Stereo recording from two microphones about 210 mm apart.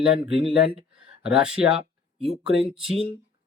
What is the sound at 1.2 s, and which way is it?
Speech, 5° right (ahead or behind).